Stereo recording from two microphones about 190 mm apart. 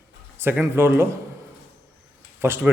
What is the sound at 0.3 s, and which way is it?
Speech, 10° right (ahead or behind).